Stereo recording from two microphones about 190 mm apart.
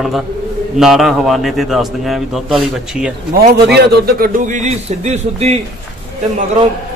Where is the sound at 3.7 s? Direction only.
60° right (ahead or behind); by 5.6 s 35° right (ahead or behind).